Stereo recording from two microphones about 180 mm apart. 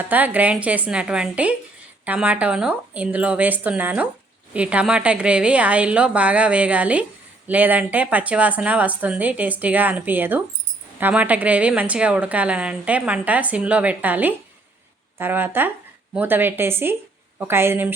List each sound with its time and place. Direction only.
0.0 s a woman's voice: 10° right (ahead or behind)